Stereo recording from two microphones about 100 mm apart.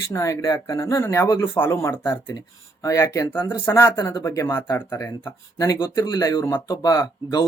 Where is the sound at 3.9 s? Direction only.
45° left (ahead or behind).